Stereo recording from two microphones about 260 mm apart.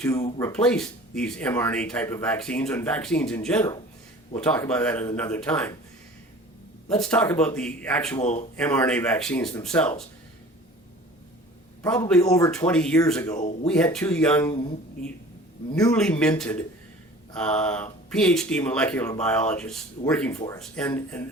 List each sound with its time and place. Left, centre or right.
0.0 s speech: centre
6.9 s speech: centre
8.2 s speech: left
8.5 s speech: centre
11.8 s a man's voice: centre
15.8 s speech: centre